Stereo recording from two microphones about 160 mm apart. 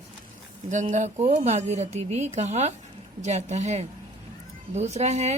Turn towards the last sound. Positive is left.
turn(degrees=-45)  # may be behind; listen again after turning